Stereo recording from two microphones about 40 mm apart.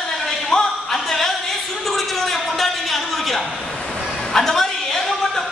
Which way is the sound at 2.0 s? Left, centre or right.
Centre.